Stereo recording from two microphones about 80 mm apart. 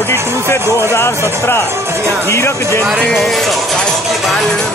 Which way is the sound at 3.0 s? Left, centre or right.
Centre.